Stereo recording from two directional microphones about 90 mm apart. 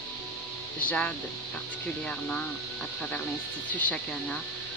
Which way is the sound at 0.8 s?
15° left (ahead or behind).